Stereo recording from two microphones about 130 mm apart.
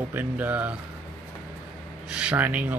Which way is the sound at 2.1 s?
10° right (ahead or behind).